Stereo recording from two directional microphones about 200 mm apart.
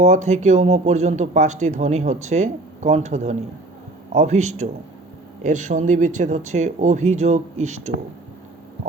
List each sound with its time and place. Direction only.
0.0 s speech: 35° right (ahead or behind)